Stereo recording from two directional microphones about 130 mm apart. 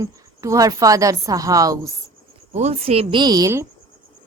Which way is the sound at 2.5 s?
60° right (ahead or behind).